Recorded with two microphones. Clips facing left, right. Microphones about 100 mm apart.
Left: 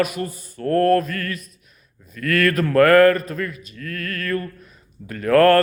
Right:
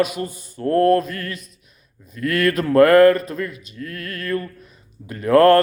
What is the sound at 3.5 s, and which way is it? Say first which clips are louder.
Speech: even; 40° left (ahead or behind).